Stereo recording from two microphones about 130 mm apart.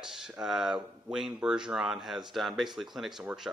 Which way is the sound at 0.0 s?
5° right (ahead or behind).